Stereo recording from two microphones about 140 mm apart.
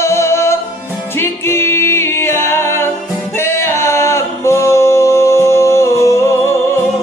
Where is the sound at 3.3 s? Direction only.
15° left (ahead or behind).